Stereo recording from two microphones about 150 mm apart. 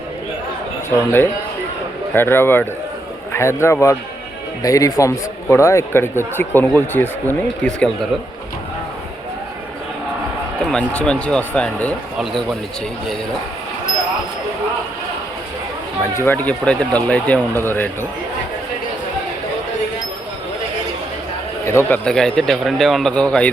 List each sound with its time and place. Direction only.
0.9 s a man's voice: 15° left (ahead or behind)
10.6 s a man's voice: 5° left (ahead or behind)
16.1 s a man's voice: 15° left (ahead or behind)
21.6 s speech: 20° left (ahead or behind)